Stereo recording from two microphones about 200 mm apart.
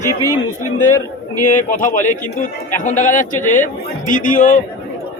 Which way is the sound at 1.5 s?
40° left (ahead or behind).